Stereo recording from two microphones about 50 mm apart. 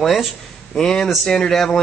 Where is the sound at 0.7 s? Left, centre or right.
Centre.